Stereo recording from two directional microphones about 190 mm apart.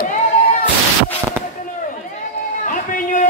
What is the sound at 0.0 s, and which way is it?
Music, 45° left (ahead or behind).